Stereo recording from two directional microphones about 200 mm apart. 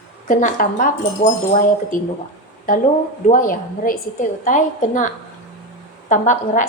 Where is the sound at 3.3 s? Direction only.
40° left (ahead or behind).